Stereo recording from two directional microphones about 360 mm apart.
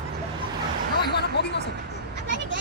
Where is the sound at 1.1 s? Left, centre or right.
Left.